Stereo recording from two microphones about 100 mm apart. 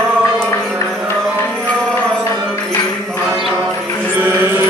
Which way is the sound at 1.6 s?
10° left (ahead or behind).